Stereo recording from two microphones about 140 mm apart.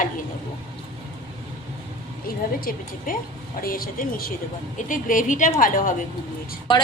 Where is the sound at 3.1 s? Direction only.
90° left.